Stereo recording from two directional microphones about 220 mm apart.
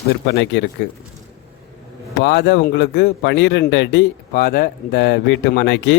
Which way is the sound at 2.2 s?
50° left (ahead or behind).